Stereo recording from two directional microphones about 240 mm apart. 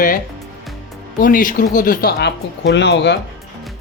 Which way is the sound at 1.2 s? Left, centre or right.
Left.